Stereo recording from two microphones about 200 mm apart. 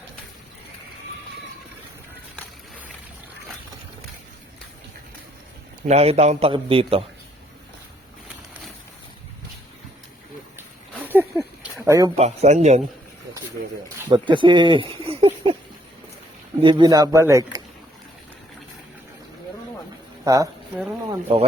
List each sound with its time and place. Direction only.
5.8 s a man's voice: 30° right (ahead or behind)
11.0 s a sound: 10° right (ahead or behind)
12.1 s a man's voice: 35° right (ahead or behind)
14.1 s speech: 25° right (ahead or behind)
16.6 s a man's voice: 25° right (ahead or behind)
20.2 s a woman's voice: 15° right (ahead or behind)
21.1 s speech: 30° right (ahead or behind)